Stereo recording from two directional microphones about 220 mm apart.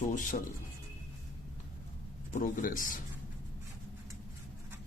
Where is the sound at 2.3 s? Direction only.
35° left (ahead or behind).